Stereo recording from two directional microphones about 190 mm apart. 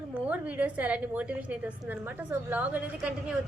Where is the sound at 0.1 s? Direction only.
10° right (ahead or behind).